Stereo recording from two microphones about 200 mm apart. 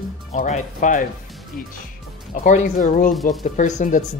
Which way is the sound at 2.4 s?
40° left (ahead or behind).